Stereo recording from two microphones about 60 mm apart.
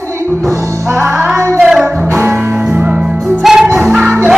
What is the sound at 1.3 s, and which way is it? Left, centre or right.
Music, right.